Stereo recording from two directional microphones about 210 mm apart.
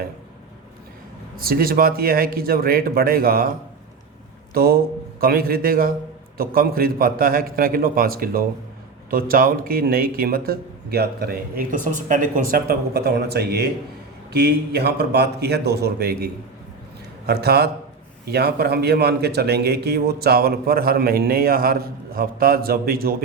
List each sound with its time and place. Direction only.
1.4 s a man's voice: 45° right (ahead or behind)
4.5 s a man's voice: 45° right (ahead or behind)